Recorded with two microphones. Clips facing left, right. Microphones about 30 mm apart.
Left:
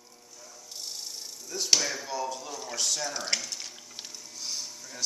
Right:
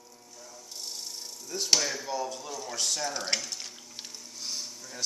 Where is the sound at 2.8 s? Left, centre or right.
Centre.